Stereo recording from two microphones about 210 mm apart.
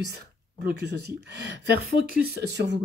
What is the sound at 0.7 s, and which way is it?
Speech, 55° right (ahead or behind).